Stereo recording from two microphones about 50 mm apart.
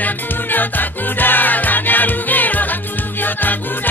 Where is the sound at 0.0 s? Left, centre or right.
Left.